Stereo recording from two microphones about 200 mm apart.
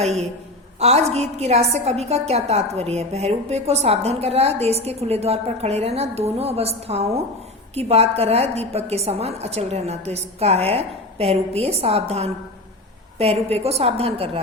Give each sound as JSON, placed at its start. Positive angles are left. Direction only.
{"t": 0.0, "sound": "a woman's voice", "side_deg": -30}